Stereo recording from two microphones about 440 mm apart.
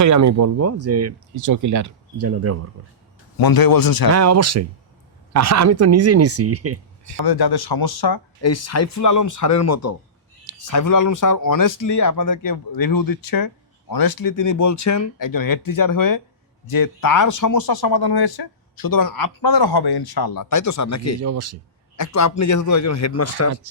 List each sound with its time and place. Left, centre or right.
0.0 s speech: right
3.3 s speech: left
4.1 s speech: right
7.2 s speech: left
8.4 s speech: left
21.2 s speech: right
21.9 s speech: left